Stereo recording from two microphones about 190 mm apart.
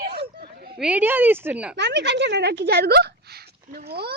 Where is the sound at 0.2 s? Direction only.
55° right (ahead or behind).